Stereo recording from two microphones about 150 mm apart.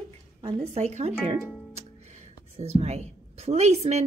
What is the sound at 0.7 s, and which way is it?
Speech, 45° right (ahead or behind).